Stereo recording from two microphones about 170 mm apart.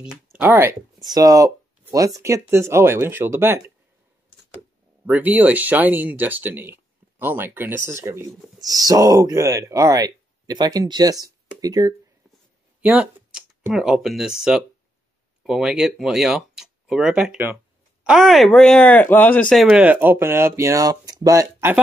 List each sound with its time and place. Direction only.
0.3 s speech: 10° right (ahead or behind)
1.0 s speech: 20° right (ahead or behind)
5.0 s speech: 10° right (ahead or behind)
12.8 s speech: 5° right (ahead or behind)